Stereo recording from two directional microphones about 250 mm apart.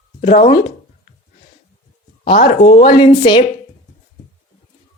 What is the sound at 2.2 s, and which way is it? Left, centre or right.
A woman's voice, left.